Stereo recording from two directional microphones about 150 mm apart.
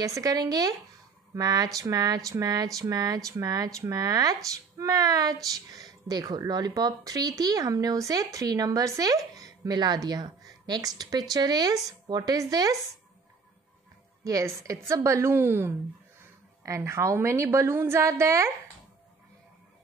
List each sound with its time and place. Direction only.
0.0 s a woman's voice: 25° right (ahead or behind)
14.2 s a woman's voice: 20° right (ahead or behind)